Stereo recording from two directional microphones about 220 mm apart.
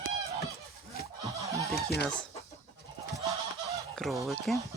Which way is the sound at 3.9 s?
Centre (ahead or behind).